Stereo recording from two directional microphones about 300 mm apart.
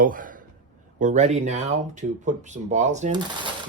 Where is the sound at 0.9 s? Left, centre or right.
Right.